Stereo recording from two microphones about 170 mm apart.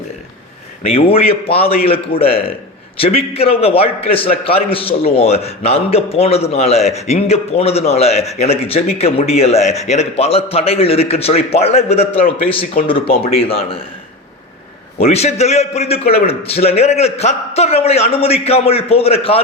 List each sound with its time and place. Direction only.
0.8 s a man's voice: 35° left (ahead or behind)
14.9 s a man's voice: 35° left (ahead or behind)